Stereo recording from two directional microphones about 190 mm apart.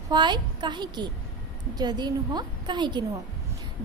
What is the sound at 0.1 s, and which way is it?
A woman's voice, 25° right (ahead or behind).